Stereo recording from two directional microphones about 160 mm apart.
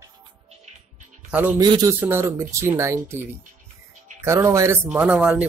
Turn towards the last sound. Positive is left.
turn(degrees=-10)  # may be behind; listen again after turning